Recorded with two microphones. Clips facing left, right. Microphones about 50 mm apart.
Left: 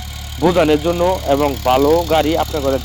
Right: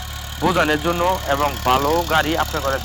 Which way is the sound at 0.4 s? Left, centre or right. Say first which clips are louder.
Left 4 dB; right.